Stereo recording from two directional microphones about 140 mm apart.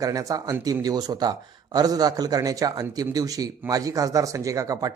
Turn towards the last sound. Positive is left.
turn(degrees=-25)  # may be behind; listen again after turning